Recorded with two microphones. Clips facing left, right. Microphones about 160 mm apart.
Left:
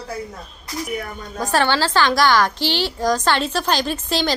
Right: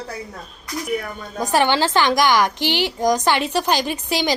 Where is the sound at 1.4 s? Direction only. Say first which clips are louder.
Right 1 dB; 15° right (ahead or behind).